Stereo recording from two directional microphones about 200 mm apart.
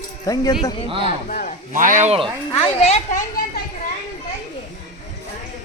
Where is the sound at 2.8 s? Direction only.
35° left (ahead or behind).